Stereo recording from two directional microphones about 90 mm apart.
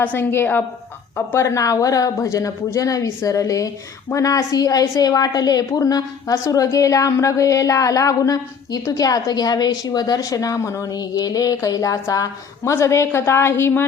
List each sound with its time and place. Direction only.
0.0 s a woman's voice: 20° left (ahead or behind)